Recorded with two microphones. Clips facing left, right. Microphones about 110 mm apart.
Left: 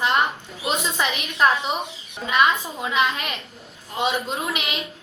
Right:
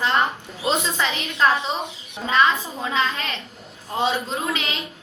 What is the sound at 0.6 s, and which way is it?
A woman's voice, 15° left (ahead or behind).